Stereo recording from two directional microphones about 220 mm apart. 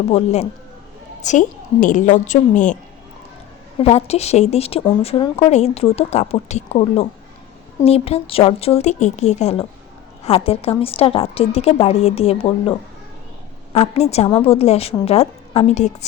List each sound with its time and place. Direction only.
0.1 s a woman's voice: 30° left (ahead or behind)
3.8 s speech: 30° left (ahead or behind)
13.7 s speech: 30° left (ahead or behind)